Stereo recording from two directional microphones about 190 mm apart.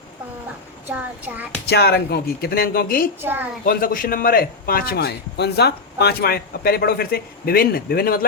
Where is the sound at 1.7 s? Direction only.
55° left (ahead or behind).